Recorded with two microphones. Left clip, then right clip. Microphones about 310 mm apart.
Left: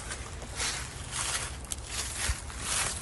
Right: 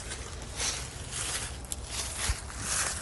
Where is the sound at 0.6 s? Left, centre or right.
Centre.